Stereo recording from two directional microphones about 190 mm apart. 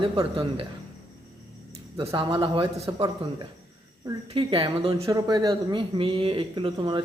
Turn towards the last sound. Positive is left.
turn(degrees=-25)  # may be behind; listen again after turning